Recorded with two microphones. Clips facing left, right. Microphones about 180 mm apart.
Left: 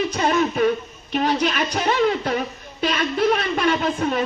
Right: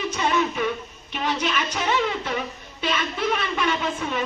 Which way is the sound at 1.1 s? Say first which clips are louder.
Left 5 dB; 40° left (ahead or behind).